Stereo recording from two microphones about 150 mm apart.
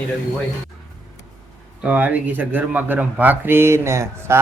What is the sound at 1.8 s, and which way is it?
Speech, 10° right (ahead or behind).